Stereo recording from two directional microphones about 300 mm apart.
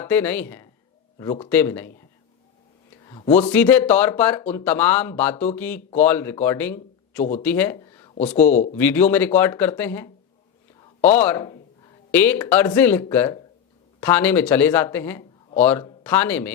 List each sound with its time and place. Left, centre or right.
0.0 s speech: centre
3.1 s speech: centre
3.5 s speech: centre